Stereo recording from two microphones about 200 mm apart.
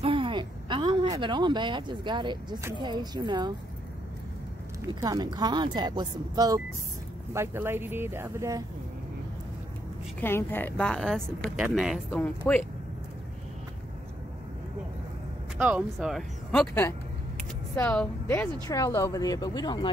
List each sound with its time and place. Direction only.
0.0 s a sound: 25° right (ahead or behind)
1.1 s speech: 20° right (ahead or behind)
5.0 s speech: 20° right (ahead or behind)
10.2 s speech: 10° left (ahead or behind)
15.5 s speech: 5° right (ahead or behind); by 19.9 s 20° left (ahead or behind)